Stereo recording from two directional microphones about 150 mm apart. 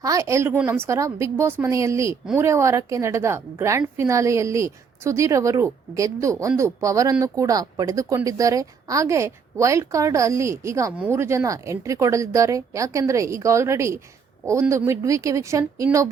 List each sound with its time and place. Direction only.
0.0 s speech: 20° right (ahead or behind)